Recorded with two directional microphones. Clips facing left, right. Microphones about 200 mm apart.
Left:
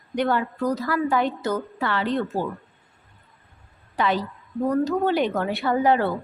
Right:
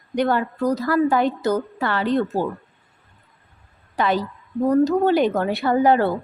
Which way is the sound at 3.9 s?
45° right (ahead or behind).